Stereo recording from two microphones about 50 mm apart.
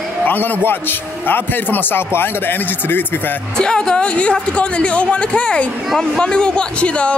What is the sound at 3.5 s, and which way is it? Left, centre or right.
Speech, centre.